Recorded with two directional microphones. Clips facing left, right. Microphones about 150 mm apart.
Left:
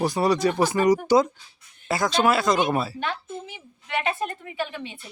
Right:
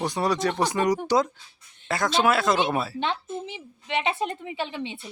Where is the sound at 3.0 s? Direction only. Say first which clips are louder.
Right 2 dB; 25° right (ahead or behind).